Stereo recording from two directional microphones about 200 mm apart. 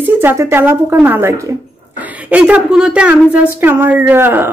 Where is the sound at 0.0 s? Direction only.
10° right (ahead or behind).